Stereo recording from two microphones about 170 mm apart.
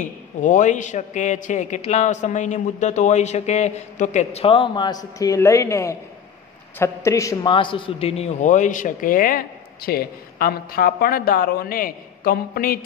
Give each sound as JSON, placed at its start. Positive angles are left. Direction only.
{"t": 0.0, "sound": "a man's voice", "side_deg": 45}
{"t": 7.5, "sound": "a man's voice", "side_deg": 30}